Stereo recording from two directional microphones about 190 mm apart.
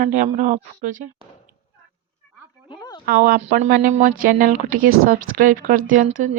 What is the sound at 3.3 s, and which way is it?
A woman's voice, 40° right (ahead or behind).